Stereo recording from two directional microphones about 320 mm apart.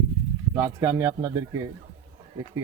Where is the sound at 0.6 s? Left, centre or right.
Centre.